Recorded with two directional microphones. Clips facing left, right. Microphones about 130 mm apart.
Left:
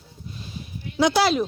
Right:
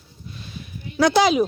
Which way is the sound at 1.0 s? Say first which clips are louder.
Right 2 dB; 15° left (ahead or behind).